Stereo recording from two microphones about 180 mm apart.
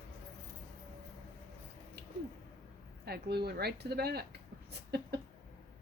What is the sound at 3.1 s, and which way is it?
Speech, 60° right (ahead or behind).